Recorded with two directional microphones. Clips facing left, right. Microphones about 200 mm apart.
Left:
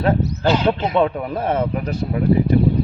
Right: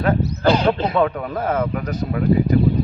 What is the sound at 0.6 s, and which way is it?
A man's voice, 25° left (ahead or behind).